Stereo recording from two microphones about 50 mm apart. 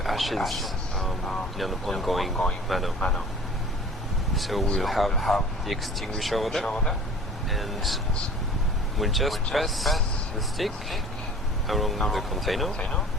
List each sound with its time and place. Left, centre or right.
0.0 s a sound: centre
1.5 s speech: centre
3.0 s speech: centre
4.4 s speech: centre
9.0 s speech: centre